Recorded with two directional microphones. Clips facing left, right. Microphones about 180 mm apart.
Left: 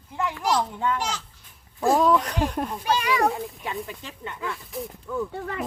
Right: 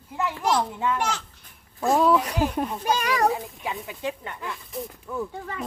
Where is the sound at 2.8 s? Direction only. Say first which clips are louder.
Left 2 dB; 45° right (ahead or behind).